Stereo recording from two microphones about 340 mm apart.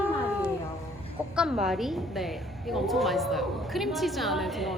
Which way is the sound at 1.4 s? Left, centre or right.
Centre.